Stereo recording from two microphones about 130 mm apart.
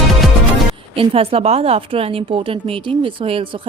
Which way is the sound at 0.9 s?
45° right (ahead or behind).